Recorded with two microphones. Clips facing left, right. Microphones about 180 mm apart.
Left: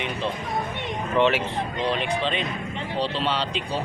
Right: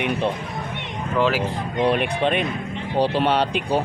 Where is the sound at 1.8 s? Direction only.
60° right (ahead or behind).